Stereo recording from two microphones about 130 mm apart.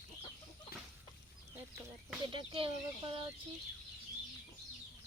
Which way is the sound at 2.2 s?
40° right (ahead or behind).